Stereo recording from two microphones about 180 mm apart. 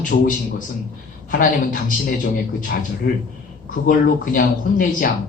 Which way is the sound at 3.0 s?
60° left (ahead or behind).